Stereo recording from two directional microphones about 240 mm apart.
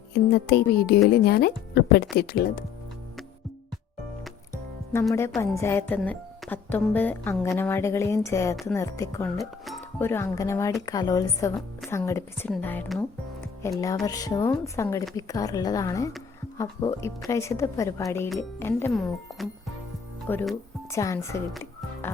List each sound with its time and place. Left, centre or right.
0.4 s speech: left
5.4 s speech: centre
9.4 s speech: centre
10.1 s speech: centre
21.5 s music: centre